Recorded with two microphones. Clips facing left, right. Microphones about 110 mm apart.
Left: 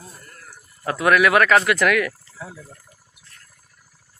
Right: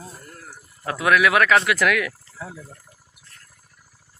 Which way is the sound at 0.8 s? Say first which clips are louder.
Left 2 dB; centre (ahead or behind).